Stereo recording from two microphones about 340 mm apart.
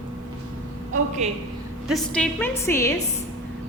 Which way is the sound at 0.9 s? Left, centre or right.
Centre.